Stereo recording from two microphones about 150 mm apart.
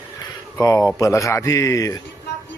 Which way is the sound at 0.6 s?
20° left (ahead or behind).